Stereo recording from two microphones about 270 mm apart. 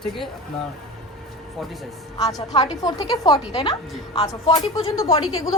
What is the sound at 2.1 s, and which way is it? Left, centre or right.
A woman's voice, centre.